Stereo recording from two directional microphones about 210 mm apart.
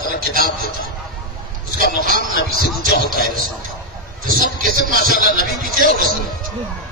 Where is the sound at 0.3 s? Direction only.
45° right (ahead or behind).